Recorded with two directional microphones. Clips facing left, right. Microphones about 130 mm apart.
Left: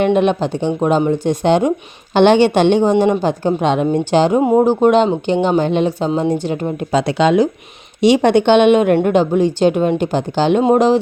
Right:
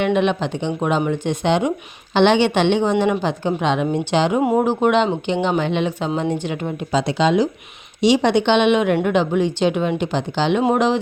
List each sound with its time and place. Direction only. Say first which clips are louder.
0.0 s a woman's voice: left 4 dB; 40° left (ahead or behind)
4.4 s speech: left 5 dB; 25° left (ahead or behind)
4.8 s speech: left 5 dB; 40° left (ahead or behind)
6.9 s a woman's voice: left 4 dB; 60° left (ahead or behind)
10.6 s speech: left 6 dB; 35° left (ahead or behind)